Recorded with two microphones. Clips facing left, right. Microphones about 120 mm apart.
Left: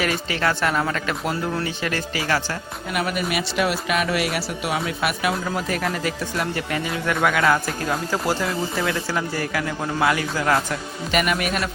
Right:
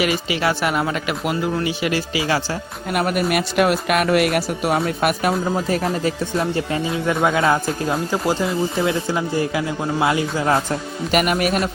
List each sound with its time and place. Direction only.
0.0 s speech: 15° right (ahead or behind)
2.9 s speech: 45° right (ahead or behind)
5.5 s speech: 30° right (ahead or behind)
11.1 s speech: 45° right (ahead or behind)